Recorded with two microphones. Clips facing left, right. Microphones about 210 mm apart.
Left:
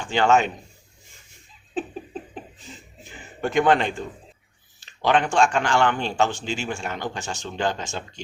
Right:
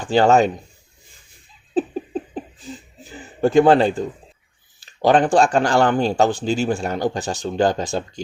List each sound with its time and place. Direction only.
0.0 s speech: 35° right (ahead or behind)
3.0 s a man's voice: 35° right (ahead or behind)